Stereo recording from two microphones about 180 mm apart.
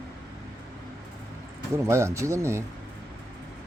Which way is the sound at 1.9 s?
15° right (ahead or behind).